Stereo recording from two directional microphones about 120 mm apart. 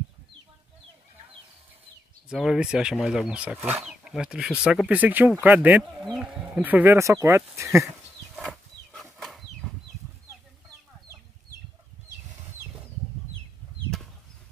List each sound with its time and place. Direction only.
2.2 s speech: 5° right (ahead or behind)
6.1 s speech: centre (ahead or behind)
6.6 s speech: 15° right (ahead or behind)
8.4 s a sound: centre (ahead or behind)